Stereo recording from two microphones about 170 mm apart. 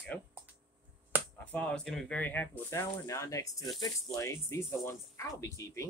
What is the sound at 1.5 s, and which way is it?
Speech, 5° left (ahead or behind).